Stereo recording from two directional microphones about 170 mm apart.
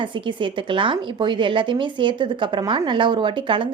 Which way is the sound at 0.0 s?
30° right (ahead or behind).